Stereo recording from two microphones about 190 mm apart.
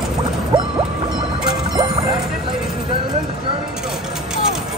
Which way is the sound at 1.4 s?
20° right (ahead or behind).